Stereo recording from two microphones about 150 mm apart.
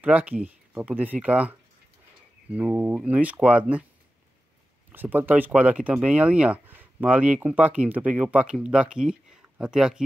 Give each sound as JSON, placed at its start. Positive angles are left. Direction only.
{"t": 0.0, "sound": "speech", "side_deg": -10}
{"t": 4.9, "sound": "speech", "side_deg": -10}